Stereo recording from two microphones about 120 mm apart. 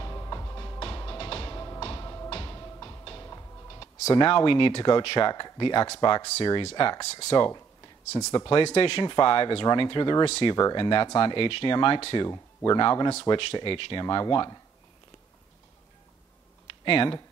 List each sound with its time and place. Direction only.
0.0 s music: 30° left (ahead or behind)
0.7 s music: 45° left (ahead or behind)
1.8 s music: 45° left (ahead or behind); by 3.8 s 30° left (ahead or behind)
3.8 s speech: 45° left (ahead or behind)
8.6 s speech: 55° left (ahead or behind)
10.2 s speech: 55° left (ahead or behind)
10.5 s speech: 35° left (ahead or behind)
12.3 s speech: 35° left (ahead or behind)
16.8 s speech: 45° left (ahead or behind)